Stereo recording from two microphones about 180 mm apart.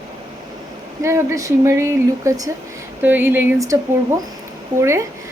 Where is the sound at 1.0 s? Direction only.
15° right (ahead or behind).